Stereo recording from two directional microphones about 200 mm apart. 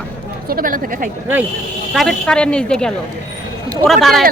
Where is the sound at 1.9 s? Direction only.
5° left (ahead or behind).